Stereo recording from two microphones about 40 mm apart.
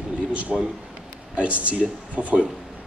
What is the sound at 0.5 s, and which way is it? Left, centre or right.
Speech, centre.